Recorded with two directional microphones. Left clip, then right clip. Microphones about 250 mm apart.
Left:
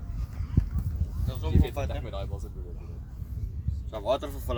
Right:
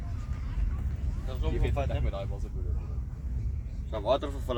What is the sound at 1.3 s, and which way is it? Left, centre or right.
Speech, left.